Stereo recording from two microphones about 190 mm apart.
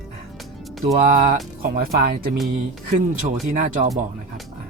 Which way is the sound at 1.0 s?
45° right (ahead or behind).